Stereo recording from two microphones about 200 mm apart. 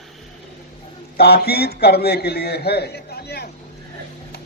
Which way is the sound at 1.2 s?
55° left (ahead or behind).